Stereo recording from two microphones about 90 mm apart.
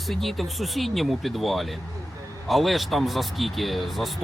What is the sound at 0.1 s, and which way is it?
Speech, centre (ahead or behind).